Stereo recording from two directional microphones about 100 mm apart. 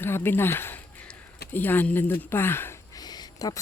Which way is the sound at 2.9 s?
40° left (ahead or behind).